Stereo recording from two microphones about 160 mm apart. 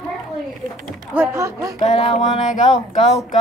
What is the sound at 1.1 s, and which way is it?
Speech, 15° right (ahead or behind).